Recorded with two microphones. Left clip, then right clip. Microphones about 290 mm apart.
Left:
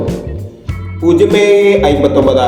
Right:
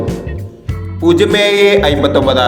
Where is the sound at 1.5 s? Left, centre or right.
Right.